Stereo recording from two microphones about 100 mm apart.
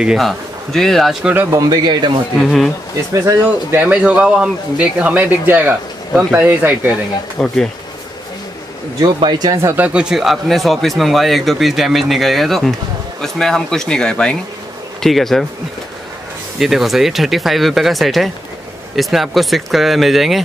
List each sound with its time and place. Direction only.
0.0 s speech: 5° right (ahead or behind)
1.2 s speech: 20° right (ahead or behind)
1.5 s speech: 40° right (ahead or behind)
2.3 s speech: 5° left (ahead or behind)
3.1 s speech: 30° right (ahead or behind)
3.4 s speech: 15° right (ahead or behind)
7.3 s speech: 5° left (ahead or behind)
9.0 s speech: 50° right (ahead or behind)
9.8 s speech: 10° right (ahead or behind)
16.5 s speech: 5° right (ahead or behind)